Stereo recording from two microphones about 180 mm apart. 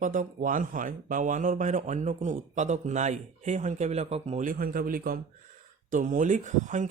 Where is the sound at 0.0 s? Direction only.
45° right (ahead or behind).